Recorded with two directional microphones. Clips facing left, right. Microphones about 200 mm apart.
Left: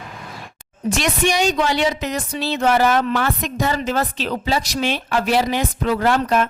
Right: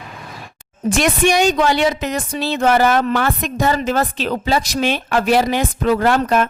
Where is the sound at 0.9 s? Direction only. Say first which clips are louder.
Right 4 dB; 50° right (ahead or behind).